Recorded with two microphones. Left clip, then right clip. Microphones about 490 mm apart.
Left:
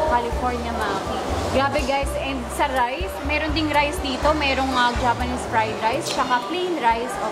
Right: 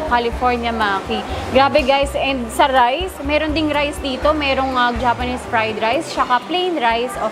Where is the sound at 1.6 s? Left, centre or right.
Right.